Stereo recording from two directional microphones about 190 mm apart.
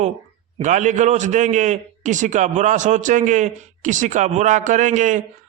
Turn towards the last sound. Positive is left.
turn(degrees=-40)  # may be behind; listen again after turning